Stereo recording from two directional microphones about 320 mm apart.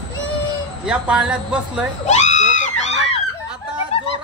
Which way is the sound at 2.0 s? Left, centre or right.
Left.